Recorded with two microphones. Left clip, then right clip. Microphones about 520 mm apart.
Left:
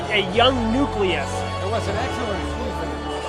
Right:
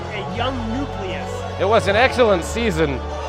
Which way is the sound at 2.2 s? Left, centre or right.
Right.